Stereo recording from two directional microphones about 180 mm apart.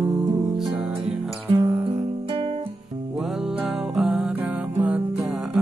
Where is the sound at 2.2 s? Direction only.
30° right (ahead or behind).